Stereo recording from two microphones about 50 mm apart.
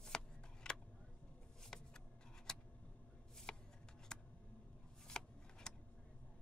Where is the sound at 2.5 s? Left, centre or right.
Centre.